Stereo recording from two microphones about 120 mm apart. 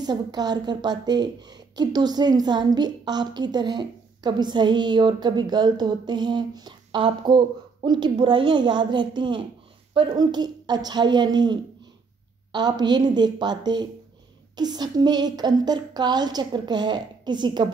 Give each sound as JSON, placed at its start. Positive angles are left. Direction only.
{"t": 0.0, "sound": "a woman's voice", "side_deg": -35}